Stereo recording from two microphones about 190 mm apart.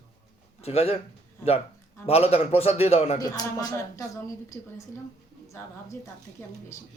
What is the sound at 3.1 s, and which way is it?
Speech, 20° left (ahead or behind).